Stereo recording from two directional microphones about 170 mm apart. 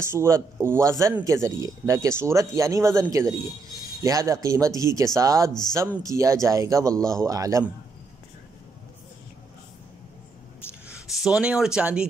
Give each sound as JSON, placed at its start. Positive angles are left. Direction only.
{"t": 0.0, "sound": "speech", "side_deg": -15}
{"t": 10.9, "sound": "speech", "side_deg": 0}